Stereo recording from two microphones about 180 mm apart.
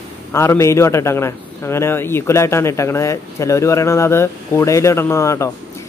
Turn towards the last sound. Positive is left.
turn(degrees=15)  # may be behind; listen again after turning